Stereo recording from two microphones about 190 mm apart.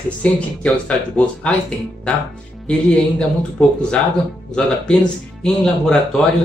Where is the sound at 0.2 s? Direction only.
5° left (ahead or behind).